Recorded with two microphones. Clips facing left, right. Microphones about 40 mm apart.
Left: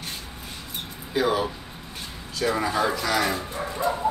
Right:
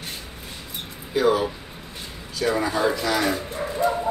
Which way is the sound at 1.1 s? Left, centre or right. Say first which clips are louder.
Right 3 dB; centre.